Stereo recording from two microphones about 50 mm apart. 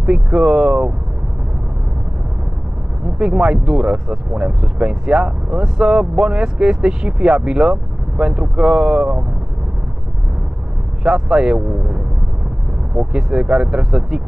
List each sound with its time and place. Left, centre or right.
0.0 s speech: centre
3.2 s speech: centre
11.1 s speech: centre